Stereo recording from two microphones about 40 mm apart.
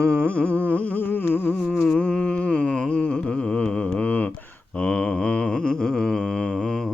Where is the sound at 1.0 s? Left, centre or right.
Left.